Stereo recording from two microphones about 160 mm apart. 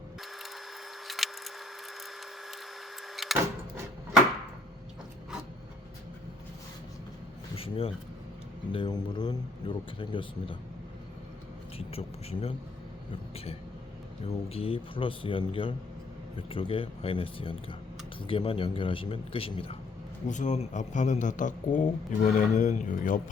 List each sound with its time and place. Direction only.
1.0 s a sound: centre (ahead or behind)
3.2 s vehicle: centre (ahead or behind)
7.5 s a sound: 35° left (ahead or behind)
8.7 s speech: 30° left (ahead or behind)
11.8 s speech: 40° left (ahead or behind)
14.3 s speech: 40° left (ahead or behind)
20.2 s a man's voice: 50° left (ahead or behind)